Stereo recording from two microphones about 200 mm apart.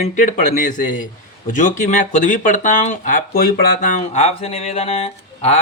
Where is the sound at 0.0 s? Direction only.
35° left (ahead or behind).